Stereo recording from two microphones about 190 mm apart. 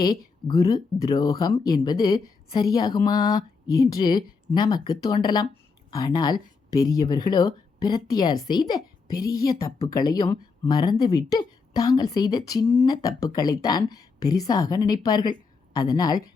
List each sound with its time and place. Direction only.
0.0 s a woman's voice: 25° left (ahead or behind)